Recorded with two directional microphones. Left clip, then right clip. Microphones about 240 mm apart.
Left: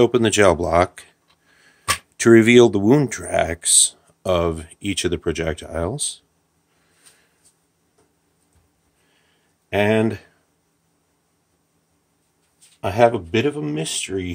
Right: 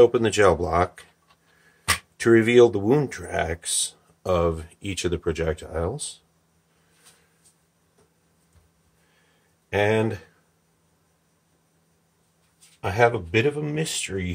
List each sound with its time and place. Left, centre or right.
0.0 s speech: left
2.1 s speech: left
9.7 s speech: left
12.8 s speech: left